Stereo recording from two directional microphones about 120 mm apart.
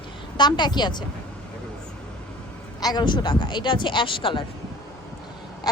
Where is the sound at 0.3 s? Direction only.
40° left (ahead or behind).